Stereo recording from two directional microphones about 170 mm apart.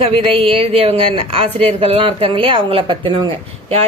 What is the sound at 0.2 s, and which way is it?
Speech, 35° right (ahead or behind).